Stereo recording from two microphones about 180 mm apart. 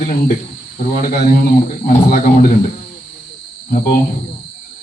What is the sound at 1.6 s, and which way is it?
Speech, 45° left (ahead or behind).